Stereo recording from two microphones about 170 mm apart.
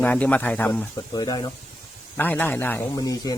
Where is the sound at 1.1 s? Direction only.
25° left (ahead or behind).